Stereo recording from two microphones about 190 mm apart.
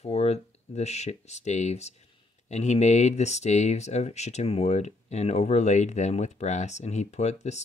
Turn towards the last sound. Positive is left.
turn(degrees=35)  # may be behind; listen again after turning